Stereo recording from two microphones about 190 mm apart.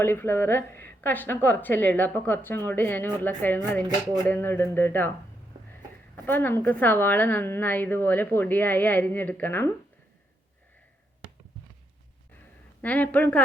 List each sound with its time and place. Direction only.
0.0 s a woman's voice: 10° left (ahead or behind)
6.2 s a woman's voice: 10° left (ahead or behind)
12.8 s a woman's voice: 10° left (ahead or behind)